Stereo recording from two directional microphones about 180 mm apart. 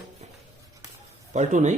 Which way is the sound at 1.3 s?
40° right (ahead or behind).